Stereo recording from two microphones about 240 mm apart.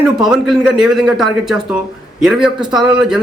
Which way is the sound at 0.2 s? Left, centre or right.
Centre.